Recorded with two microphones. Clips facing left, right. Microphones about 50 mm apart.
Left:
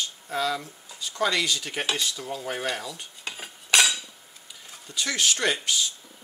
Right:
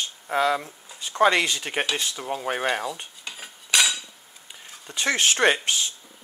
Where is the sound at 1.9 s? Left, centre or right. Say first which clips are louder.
Right 2 dB; right.